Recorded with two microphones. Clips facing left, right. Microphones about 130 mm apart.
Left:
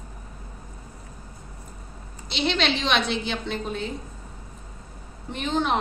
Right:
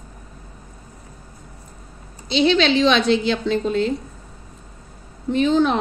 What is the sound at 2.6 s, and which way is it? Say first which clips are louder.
A woman's voice: right 8 dB; 90° right.